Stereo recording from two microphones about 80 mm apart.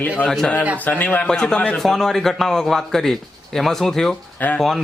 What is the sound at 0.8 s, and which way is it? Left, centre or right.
Speech, left.